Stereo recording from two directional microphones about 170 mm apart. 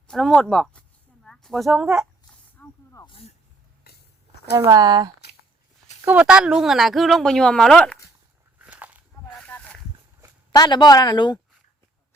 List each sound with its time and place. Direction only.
0.1 s speech: centre (ahead or behind)
2.6 s snake: 20° left (ahead or behind)
3.9 s a sound: 65° left (ahead or behind)
4.5 s speech: 20° right (ahead or behind)
6.1 s speech: 5° right (ahead or behind)
8.5 s walk: 10° right (ahead or behind)
9.4 s a sound: 5° left (ahead or behind)
10.5 s speech: 25° left (ahead or behind)